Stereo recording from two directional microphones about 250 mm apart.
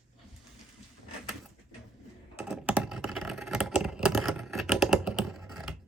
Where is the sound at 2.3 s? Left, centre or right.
Centre.